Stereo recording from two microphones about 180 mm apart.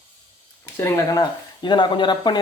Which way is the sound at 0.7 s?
15° left (ahead or behind).